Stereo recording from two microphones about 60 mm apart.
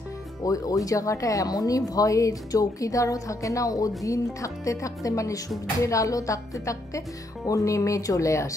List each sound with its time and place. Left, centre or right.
0.5 s speech: left